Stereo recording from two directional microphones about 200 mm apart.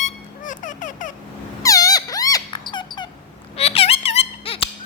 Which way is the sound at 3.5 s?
30° left (ahead or behind).